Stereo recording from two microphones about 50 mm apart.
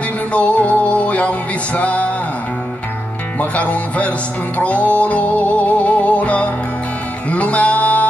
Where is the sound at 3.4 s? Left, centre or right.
Left.